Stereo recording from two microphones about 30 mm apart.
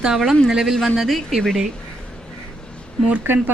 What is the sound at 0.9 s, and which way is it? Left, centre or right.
Speech, centre.